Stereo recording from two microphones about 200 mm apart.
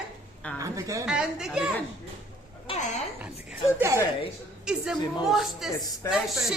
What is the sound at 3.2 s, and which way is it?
A woman's voice, 10° right (ahead or behind).